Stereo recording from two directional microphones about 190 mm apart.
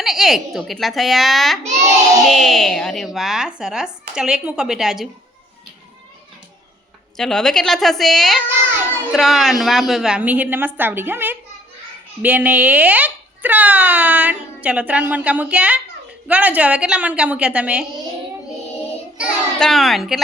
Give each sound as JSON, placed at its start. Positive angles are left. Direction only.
{"t": 0.0, "sound": "a child's voice", "side_deg": 0}
{"t": 7.2, "sound": "a child's voice", "side_deg": 5}
{"t": 19.1, "sound": "a child's voice", "side_deg": 0}